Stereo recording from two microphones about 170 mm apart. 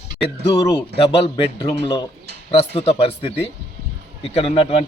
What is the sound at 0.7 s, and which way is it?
Speech, 30° left (ahead or behind).